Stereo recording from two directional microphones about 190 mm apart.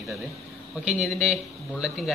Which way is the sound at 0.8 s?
Centre (ahead or behind).